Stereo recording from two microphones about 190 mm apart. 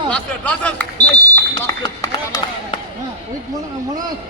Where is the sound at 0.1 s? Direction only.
5° left (ahead or behind).